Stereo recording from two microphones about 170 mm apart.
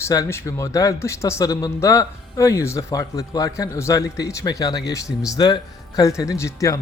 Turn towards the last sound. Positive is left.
turn(degrees=20)  # may be behind; listen again after turning